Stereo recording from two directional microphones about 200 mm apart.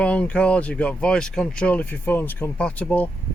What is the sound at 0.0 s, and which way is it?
Speech, 5° left (ahead or behind).